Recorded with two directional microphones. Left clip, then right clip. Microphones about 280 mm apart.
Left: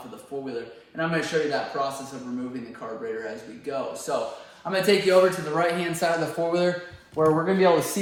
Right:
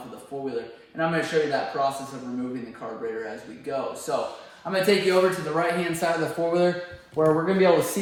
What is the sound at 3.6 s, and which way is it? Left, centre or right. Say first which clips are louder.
A man's voice: right 1 dB; centre.